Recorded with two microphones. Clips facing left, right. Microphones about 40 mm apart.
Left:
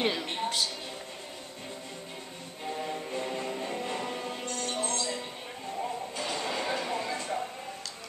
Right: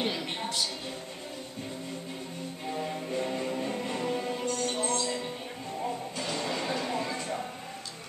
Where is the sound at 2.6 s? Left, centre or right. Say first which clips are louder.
Even; centre.